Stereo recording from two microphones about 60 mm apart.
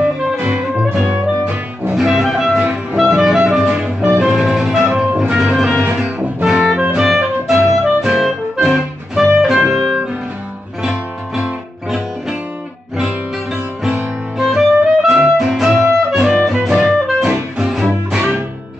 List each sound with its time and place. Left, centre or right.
0.0 s music: centre
2.0 s music: centre
2.6 s music: right
3.2 s music: centre
5.9 s music: centre
14.4 s music: centre